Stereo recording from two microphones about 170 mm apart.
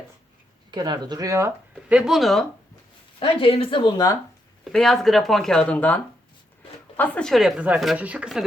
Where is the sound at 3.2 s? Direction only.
35° left (ahead or behind).